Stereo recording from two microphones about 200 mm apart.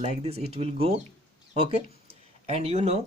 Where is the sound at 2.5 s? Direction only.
30° right (ahead or behind).